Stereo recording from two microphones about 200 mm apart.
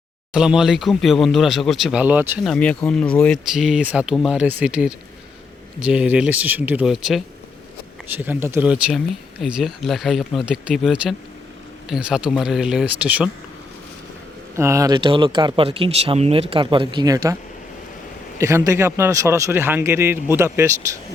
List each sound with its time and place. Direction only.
0.3 s speech: 5° right (ahead or behind)
2.4 s a man's voice: 5° left (ahead or behind)
14.5 s speech: 15° right (ahead or behind)
18.3 s a man's voice: 15° right (ahead or behind)